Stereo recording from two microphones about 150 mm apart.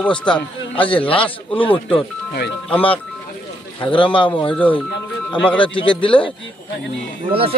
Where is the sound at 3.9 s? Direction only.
35° left (ahead or behind).